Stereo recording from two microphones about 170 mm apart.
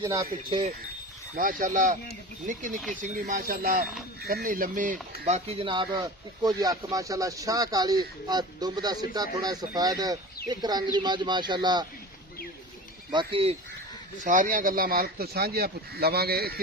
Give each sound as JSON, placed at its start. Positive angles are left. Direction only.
{"t": 0.0, "sound": "speech", "side_deg": -20}
{"t": 1.4, "sound": "speech", "side_deg": -55}
{"t": 13.1, "sound": "speech", "side_deg": -30}
{"t": 14.3, "sound": "speech", "side_deg": -50}